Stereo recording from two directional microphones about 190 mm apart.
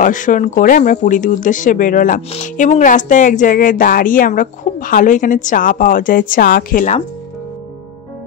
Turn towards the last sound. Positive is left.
turn(degrees=45)  # may be behind; listen again after turning